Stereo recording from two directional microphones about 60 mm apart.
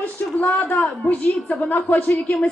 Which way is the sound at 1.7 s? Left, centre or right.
Left.